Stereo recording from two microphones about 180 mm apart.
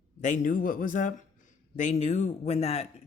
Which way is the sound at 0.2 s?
40° left (ahead or behind).